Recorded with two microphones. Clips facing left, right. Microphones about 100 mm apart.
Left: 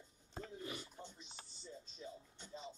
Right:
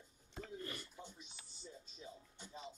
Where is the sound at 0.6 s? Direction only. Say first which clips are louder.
Left 1 dB; 10° left (ahead or behind).